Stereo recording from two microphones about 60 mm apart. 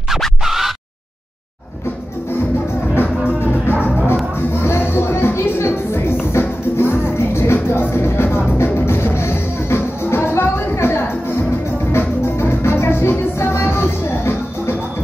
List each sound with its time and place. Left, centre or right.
0.4 s scratch: centre
4.6 s music: left